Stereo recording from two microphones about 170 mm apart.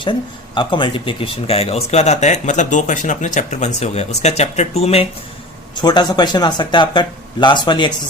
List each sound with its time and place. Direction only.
0.0 s speech: 30° left (ahead or behind)
5.7 s speech: 25° left (ahead or behind)